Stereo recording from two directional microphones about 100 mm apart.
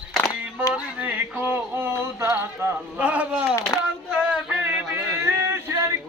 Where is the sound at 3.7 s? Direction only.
40° left (ahead or behind).